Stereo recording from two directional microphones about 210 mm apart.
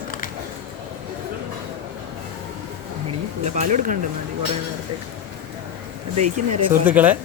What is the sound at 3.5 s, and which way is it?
Speech, 35° right (ahead or behind).